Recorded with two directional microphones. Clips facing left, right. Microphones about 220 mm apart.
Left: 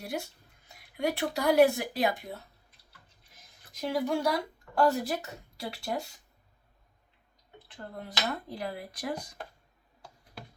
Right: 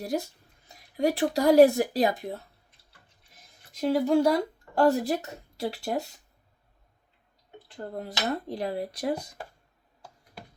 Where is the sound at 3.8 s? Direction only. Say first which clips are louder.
Right 7 dB; 30° right (ahead or behind).